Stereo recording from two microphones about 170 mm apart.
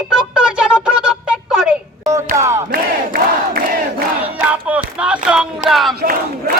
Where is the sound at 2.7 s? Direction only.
60° right (ahead or behind).